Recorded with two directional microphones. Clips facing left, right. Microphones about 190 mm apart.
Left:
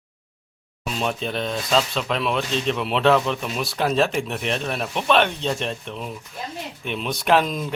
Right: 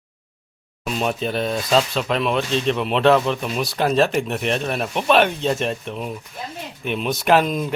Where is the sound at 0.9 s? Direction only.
5° right (ahead or behind).